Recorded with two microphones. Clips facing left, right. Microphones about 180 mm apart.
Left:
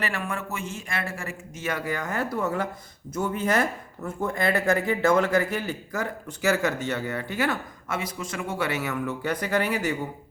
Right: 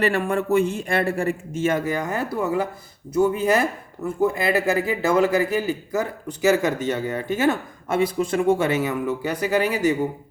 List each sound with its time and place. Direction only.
0.1 s a man's voice: 35° right (ahead or behind)
1.6 s a man's voice: 20° right (ahead or behind)
8.5 s speech: 20° right (ahead or behind)